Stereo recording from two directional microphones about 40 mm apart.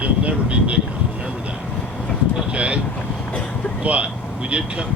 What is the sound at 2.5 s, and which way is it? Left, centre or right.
Speech, right.